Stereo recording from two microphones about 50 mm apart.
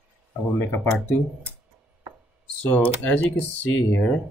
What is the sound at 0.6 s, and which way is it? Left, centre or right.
Speech, left.